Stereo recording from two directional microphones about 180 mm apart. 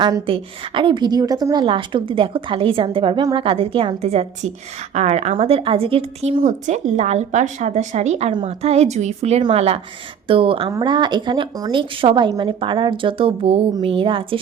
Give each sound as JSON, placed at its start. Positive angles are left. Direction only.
{"t": 0.0, "sound": "a woman's voice", "side_deg": -25}